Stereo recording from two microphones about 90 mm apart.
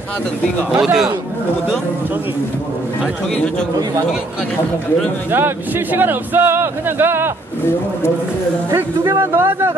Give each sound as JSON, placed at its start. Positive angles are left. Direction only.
{"t": 0.7, "sound": "a man's voice", "side_deg": -10}
{"t": 5.3, "sound": "speech", "side_deg": -25}
{"t": 8.6, "sound": "speech", "side_deg": -30}